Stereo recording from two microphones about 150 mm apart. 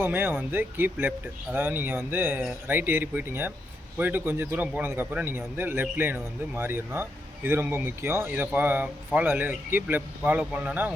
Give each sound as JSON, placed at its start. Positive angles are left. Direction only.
{"t": 0.0, "sound": "a man's voice", "side_deg": -15}